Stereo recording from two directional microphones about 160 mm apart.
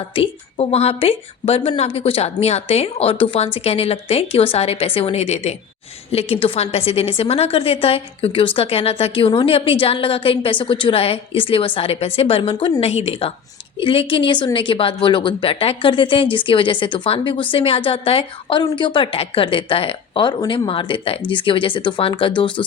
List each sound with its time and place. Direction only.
0.2 s a woman's voice: 40° left (ahead or behind)